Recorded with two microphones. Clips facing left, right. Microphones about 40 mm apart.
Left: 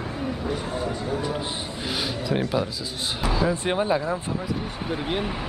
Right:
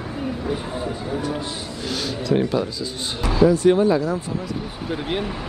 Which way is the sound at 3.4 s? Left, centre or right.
Left.